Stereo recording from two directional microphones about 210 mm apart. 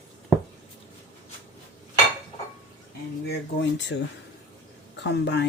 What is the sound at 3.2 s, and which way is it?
Speech, 55° left (ahead or behind).